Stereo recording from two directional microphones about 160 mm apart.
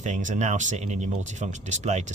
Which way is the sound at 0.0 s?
50° right (ahead or behind).